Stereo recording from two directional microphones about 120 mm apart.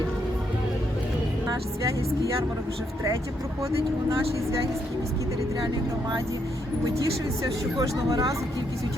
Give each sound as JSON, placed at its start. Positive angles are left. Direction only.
{"t": 7.8, "sound": "speech", "side_deg": -30}